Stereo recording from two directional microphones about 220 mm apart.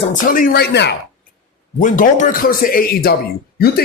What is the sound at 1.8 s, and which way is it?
Speech, 35° left (ahead or behind).